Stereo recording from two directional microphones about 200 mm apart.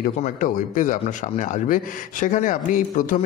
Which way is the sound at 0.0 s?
40° left (ahead or behind).